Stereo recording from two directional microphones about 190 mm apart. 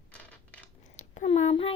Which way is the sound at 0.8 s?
35° left (ahead or behind).